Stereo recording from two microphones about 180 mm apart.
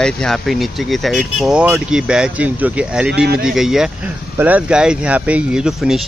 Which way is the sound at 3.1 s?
65° right (ahead or behind).